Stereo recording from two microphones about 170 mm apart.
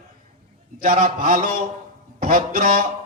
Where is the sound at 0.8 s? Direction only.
55° right (ahead or behind).